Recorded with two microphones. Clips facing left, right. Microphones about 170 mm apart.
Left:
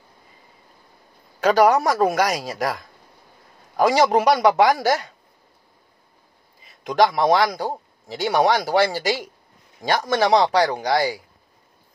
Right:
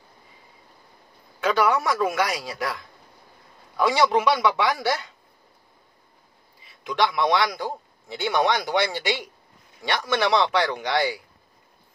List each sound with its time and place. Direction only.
1.4 s a man's voice: 40° left (ahead or behind)
6.6 s a man's voice: 40° left (ahead or behind)